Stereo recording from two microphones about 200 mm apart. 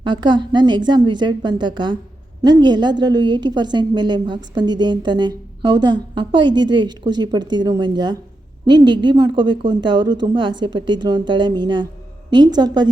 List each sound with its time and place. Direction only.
0.0 s a woman's voice: 20° right (ahead or behind)